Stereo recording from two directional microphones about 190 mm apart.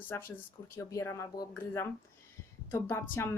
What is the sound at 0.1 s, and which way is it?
Speech, 10° left (ahead or behind).